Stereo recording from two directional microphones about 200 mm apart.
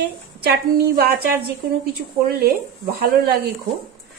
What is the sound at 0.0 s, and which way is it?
A woman's voice, 50° right (ahead or behind).